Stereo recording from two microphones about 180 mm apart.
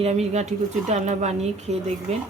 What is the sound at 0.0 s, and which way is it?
Speech, 40° right (ahead or behind).